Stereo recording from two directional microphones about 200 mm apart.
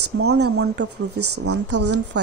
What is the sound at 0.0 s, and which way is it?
Speech, 75° right (ahead or behind).